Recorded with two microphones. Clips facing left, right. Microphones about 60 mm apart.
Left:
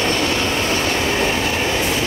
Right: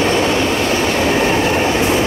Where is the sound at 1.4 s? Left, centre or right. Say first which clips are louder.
Right 5 dB; right.